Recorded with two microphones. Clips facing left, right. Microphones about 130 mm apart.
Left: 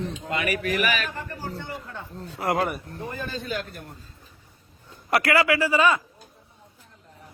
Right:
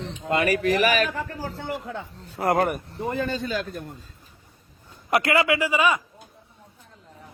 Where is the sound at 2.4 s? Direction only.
50° right (ahead or behind).